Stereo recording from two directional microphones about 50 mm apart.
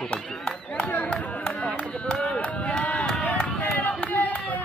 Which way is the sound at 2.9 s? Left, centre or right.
Centre.